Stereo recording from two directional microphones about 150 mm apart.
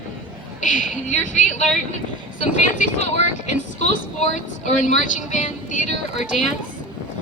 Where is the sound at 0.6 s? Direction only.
60° left (ahead or behind).